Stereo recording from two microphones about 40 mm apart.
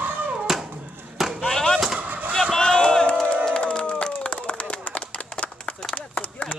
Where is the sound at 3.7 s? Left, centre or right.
Left.